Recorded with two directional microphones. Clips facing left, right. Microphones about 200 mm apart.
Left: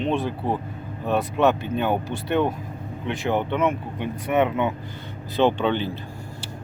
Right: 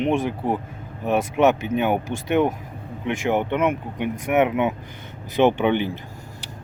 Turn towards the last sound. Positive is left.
turn(degrees=-15)  # may be behind; listen again after turning